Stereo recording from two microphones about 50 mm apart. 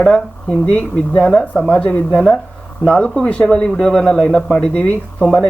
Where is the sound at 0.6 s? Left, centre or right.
Left.